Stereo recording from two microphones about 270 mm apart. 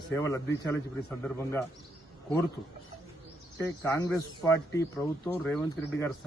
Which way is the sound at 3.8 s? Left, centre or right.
Centre.